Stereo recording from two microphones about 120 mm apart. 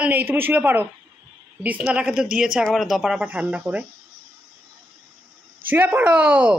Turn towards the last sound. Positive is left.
turn(degrees=-15)  # may be behind; listen again after turning